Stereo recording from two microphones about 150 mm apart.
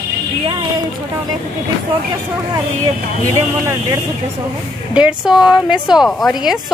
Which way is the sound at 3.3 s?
20° right (ahead or behind).